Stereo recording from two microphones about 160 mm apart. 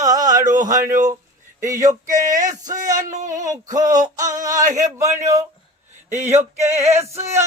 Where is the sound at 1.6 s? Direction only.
20° right (ahead or behind).